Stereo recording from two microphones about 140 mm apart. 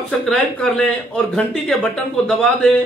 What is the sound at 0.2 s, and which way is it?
A woman's voice, 5° left (ahead or behind).